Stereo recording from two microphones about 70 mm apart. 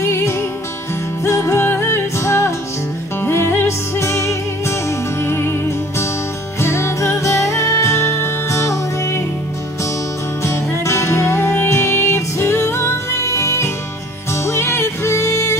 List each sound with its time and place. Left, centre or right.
0.0 s music: left
10.4 s music: left